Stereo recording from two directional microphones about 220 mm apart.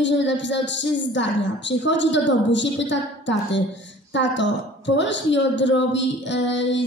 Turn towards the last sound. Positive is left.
turn(degrees=55)  # may be behind; listen again after turning